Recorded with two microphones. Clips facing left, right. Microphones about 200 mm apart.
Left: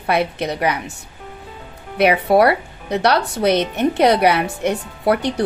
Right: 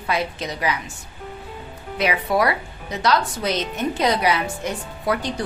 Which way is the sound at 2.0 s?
65° left (ahead or behind).